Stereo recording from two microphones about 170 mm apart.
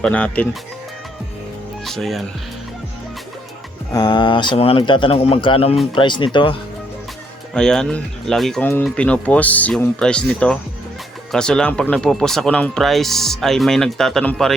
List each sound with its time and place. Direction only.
0.0 s speech: 5° left (ahead or behind)
1.8 s speech: centre (ahead or behind)
3.9 s speech: 25° left (ahead or behind)
7.5 s speech: 5° left (ahead or behind)